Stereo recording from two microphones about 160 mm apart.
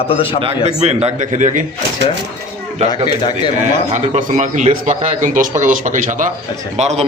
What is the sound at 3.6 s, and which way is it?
A man's voice, 50° right (ahead or behind).